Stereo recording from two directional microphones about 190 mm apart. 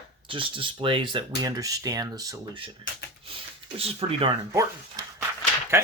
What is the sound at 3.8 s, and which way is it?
Speech, 30° right (ahead or behind).